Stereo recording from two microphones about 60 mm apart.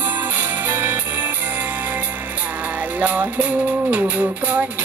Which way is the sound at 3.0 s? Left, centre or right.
Right.